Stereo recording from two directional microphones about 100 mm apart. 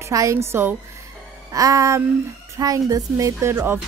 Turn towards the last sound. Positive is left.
turn(degrees=-25)  # may be behind; listen again after turning